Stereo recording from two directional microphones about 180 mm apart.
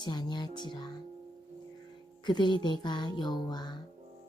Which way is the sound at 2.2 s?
25° left (ahead or behind).